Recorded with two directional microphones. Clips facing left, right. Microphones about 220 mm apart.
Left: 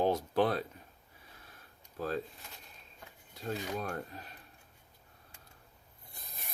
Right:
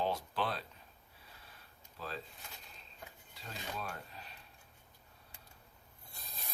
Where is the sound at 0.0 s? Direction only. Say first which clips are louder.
Left 8 dB; 50° left (ahead or behind).